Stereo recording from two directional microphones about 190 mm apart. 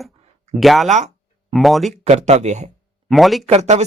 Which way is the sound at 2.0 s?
35° right (ahead or behind).